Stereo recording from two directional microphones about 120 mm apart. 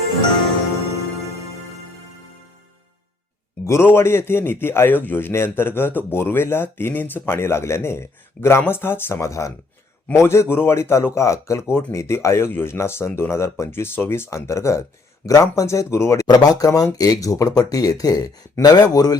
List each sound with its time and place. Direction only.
3.7 s a man's voice: 20° left (ahead or behind)